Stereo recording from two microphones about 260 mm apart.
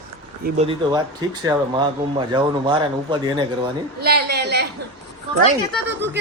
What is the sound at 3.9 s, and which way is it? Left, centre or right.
Speech, right.